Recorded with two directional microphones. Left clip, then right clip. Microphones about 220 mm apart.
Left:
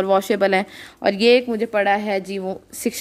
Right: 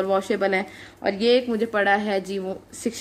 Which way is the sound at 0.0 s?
45° left (ahead or behind).